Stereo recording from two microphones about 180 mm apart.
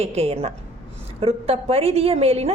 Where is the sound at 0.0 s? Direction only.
35° right (ahead or behind).